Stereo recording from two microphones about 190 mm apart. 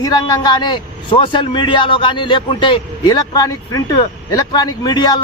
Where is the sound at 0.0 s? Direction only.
20° left (ahead or behind).